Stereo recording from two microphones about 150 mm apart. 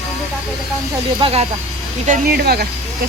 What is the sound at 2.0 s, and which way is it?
Speech, 75° right (ahead or behind).